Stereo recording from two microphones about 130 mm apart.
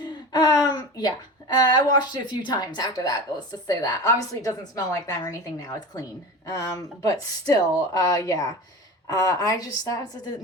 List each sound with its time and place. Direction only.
0.3 s a woman's voice: 30° left (ahead or behind)